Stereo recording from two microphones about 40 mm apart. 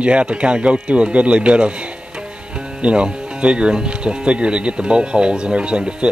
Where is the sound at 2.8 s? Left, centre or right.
Right.